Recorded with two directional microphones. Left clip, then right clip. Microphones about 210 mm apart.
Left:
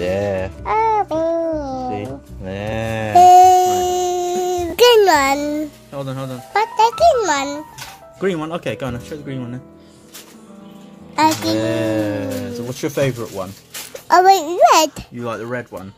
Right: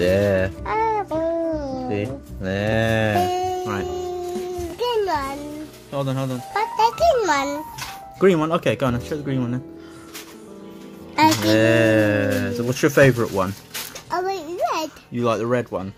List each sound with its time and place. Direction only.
0.0 s speech: 5° right (ahead or behind)
0.7 s babbling: 30° left (ahead or behind)
1.9 s music: 5° right (ahead or behind)
3.2 s a sound: 40° left (ahead or behind)
5.9 s speech: 5° left (ahead or behind)
6.5 s a child's voice: 35° left (ahead or behind)
8.2 s speech: 10° right (ahead or behind)
11.1 s music: 20° left (ahead or behind)
11.5 s speech: 10° right (ahead or behind)
14.0 s a sound: 45° left (ahead or behind)
15.1 s speech: 15° right (ahead or behind)